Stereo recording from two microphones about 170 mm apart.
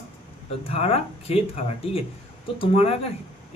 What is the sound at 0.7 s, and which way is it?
Speech, 35° left (ahead or behind).